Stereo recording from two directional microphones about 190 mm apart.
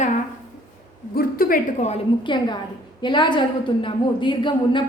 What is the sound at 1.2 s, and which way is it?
Speech, 50° left (ahead or behind).